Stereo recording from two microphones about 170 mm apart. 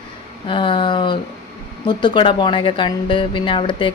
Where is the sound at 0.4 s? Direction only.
30° left (ahead or behind).